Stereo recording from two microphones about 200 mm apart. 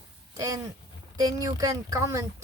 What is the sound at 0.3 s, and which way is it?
Speech, 20° right (ahead or behind).